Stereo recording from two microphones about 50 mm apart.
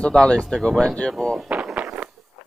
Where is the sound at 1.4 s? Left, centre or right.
Right.